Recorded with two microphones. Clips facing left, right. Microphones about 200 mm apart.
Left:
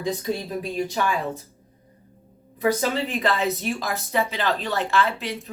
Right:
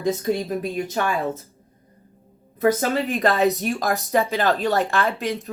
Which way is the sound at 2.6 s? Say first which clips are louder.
Right 3 dB; 45° right (ahead or behind).